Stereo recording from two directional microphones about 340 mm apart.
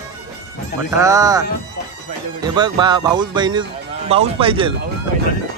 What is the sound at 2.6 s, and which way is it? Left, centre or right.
Speech, centre.